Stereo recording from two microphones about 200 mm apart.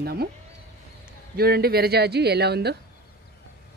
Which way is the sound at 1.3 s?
50° right (ahead or behind).